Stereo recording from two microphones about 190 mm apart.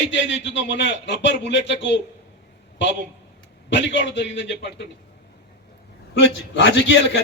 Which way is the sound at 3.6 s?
70° left (ahead or behind).